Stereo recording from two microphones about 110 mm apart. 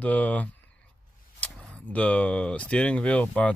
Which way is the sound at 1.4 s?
10° left (ahead or behind).